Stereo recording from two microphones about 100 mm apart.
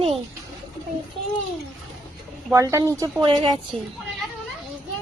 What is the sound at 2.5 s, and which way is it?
Speech, 35° right (ahead or behind).